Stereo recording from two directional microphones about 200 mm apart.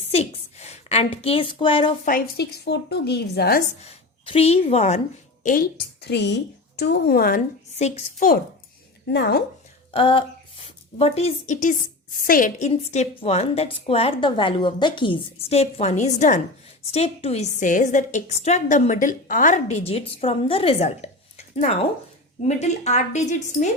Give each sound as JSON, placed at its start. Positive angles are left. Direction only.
{"t": 0.0, "sound": "a sound", "side_deg": 30}
{"t": 2.0, "sound": "a woman's voice", "side_deg": 45}
{"t": 3.8, "sound": "a woman's voice", "side_deg": 30}
{"t": 5.4, "sound": "a sound", "side_deg": 40}
{"t": 6.0, "sound": "a woman's voice", "side_deg": 60}
{"t": 9.0, "sound": "a woman's voice", "side_deg": 60}
{"t": 9.9, "sound": "a woman's voice", "side_deg": 25}